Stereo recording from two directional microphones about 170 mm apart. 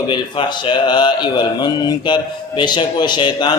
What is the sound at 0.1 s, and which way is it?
A man's voice, 25° left (ahead or behind).